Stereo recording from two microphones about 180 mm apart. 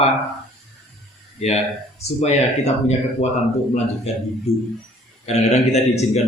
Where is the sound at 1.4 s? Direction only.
40° left (ahead or behind).